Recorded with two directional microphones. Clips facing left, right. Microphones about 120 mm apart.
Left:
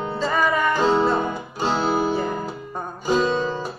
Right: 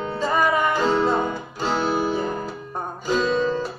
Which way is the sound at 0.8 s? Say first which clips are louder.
Left 1 dB; 20° left (ahead or behind).